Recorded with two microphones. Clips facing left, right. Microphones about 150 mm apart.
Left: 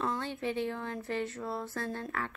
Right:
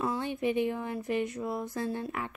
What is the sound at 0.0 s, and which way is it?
A woman's voice, 10° right (ahead or behind).